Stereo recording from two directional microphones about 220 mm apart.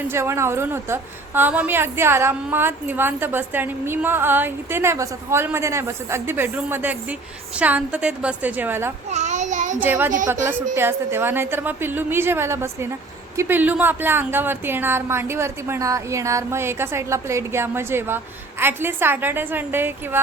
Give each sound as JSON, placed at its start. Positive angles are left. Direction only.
{"t": 0.1, "sound": "a woman's voice", "side_deg": -10}
{"t": 9.0, "sound": "a sound", "side_deg": -30}
{"t": 9.8, "sound": "a woman's voice", "side_deg": -10}